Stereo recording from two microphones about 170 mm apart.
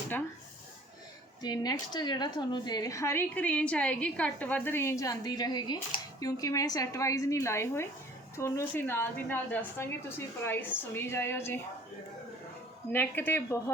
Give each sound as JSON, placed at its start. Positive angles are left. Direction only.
{"t": 1.4, "sound": "a woman's voice", "side_deg": 25}
{"t": 12.9, "sound": "a woman's voice", "side_deg": 10}